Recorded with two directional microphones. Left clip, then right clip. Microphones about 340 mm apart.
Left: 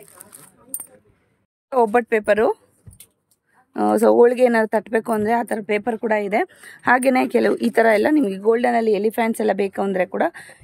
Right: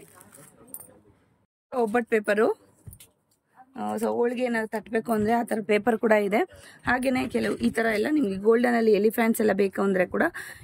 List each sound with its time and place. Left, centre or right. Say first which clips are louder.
1.7 s speech: left 7 dB; centre
3.7 s speech: left 13 dB; centre